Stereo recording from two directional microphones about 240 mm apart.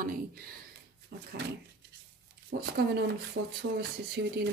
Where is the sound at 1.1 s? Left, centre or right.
Right.